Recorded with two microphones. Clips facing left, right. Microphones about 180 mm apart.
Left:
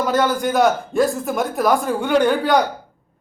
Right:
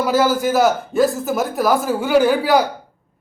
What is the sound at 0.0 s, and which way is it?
A man's voice, 5° right (ahead or behind).